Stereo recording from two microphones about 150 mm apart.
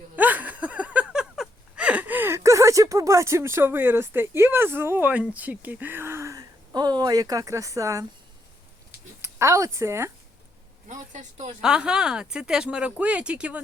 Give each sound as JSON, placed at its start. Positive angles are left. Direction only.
{"t": 0.2, "sound": "a sound", "side_deg": -10}
{"t": 5.3, "sound": "speech", "side_deg": -10}
{"t": 9.2, "sound": "speech", "side_deg": -20}
{"t": 10.8, "sound": "speech", "side_deg": -55}
{"t": 11.6, "sound": "speech", "side_deg": -5}